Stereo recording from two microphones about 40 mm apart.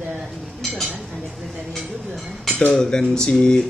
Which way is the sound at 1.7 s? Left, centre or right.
Centre.